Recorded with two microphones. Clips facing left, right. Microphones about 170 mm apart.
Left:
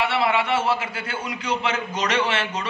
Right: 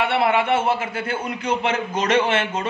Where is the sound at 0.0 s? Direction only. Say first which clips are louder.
Right 3 dB; 55° right (ahead or behind).